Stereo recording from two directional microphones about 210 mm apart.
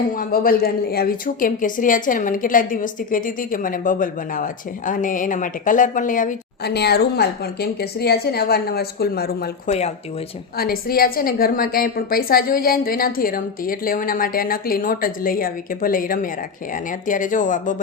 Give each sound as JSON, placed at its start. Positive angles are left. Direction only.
{"t": 0.2, "sound": "a woman's voice", "side_deg": 45}
{"t": 9.6, "sound": "a woman's voice", "side_deg": 30}
{"t": 10.6, "sound": "a woman's voice", "side_deg": 45}